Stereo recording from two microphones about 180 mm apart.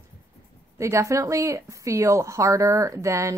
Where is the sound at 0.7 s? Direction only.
15° right (ahead or behind).